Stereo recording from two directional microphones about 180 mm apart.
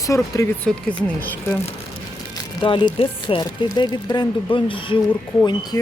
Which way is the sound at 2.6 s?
25° left (ahead or behind).